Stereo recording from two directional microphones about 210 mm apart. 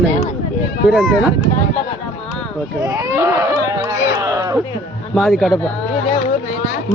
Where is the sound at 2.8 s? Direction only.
15° right (ahead or behind).